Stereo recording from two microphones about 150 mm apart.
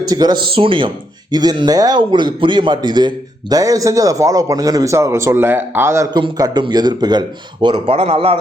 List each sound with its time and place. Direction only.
0.0 s a man's voice: 25° right (ahead or behind)
6.1 s speech: 30° right (ahead or behind)